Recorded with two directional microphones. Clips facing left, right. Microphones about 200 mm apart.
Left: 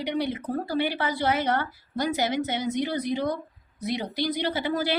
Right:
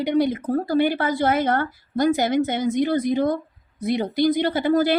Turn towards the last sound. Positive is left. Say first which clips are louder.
# right 7 dB
turn(degrees=-50)  # may be behind; listen again after turning